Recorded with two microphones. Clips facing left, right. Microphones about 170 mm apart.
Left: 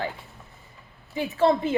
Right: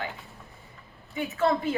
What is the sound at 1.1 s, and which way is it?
Speech, 30° left (ahead or behind).